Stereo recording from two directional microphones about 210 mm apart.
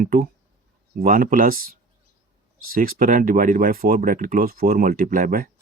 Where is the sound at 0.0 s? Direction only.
40° right (ahead or behind).